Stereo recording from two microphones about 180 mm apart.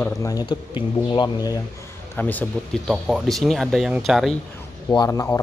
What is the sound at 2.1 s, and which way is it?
Speech, 10° left (ahead or behind).